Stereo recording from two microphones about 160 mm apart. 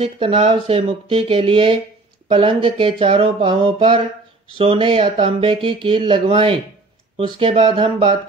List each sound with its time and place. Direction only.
0.0 s speech: 40° right (ahead or behind)